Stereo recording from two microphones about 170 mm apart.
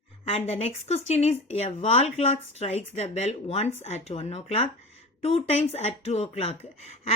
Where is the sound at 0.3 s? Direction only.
35° left (ahead or behind).